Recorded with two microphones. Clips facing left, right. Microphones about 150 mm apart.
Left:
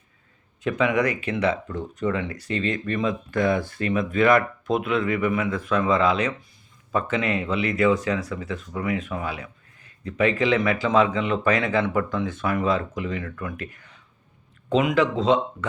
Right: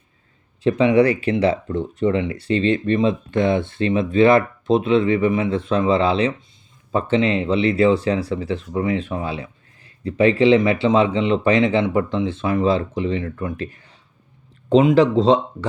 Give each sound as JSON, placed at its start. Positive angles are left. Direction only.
{"t": 0.6, "sound": "speech", "side_deg": -30}